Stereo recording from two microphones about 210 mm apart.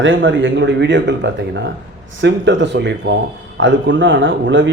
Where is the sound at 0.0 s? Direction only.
65° right (ahead or behind).